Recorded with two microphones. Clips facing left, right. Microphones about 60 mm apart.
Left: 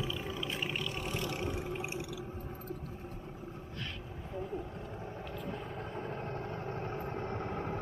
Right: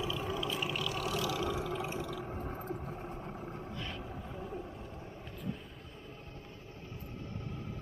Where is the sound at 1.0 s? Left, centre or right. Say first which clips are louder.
Right 4 dB; right.